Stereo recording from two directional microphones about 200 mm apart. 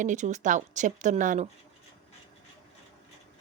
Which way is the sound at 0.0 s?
40° right (ahead or behind).